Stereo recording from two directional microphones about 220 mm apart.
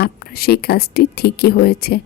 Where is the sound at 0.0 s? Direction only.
45° left (ahead or behind).